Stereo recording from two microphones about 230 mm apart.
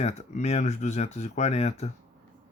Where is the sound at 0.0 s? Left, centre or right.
Left.